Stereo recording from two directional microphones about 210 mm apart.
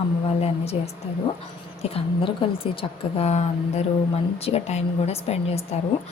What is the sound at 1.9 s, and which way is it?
A woman's voice, 25° left (ahead or behind).